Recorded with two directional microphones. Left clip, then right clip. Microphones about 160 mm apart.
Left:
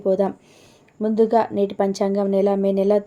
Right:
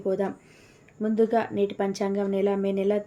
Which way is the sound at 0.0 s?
35° left (ahead or behind).